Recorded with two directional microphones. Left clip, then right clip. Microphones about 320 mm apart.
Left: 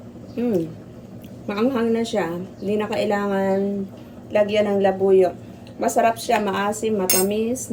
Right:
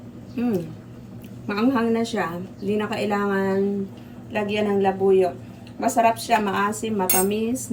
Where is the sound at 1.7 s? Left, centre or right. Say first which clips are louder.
Left 1 dB; left.